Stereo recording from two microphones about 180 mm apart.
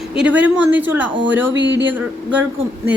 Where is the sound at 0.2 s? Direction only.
10° right (ahead or behind).